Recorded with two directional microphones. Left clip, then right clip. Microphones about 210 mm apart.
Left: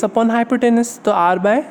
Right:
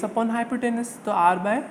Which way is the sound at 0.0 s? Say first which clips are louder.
Left 9 dB; 50° left (ahead or behind).